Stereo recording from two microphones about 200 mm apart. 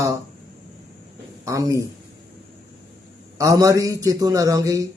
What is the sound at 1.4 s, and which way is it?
Speech, 15° right (ahead or behind).